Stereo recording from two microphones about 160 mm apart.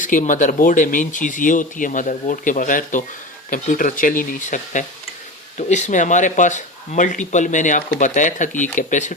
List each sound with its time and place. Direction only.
0.0 s speech: 55° left (ahead or behind)